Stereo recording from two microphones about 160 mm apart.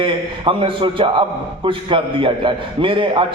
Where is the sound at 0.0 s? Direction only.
30° right (ahead or behind).